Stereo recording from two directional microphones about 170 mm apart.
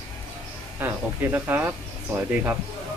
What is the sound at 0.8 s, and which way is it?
Speech, 10° right (ahead or behind).